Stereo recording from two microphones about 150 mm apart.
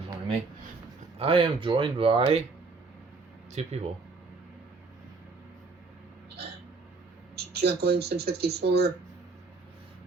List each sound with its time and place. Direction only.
1.2 s speech: 35° right (ahead or behind)
3.5 s speech: 45° right (ahead or behind)
7.3 s speech: 90° right